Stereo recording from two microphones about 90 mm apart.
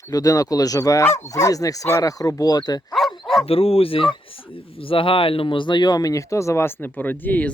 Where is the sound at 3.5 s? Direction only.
90° left.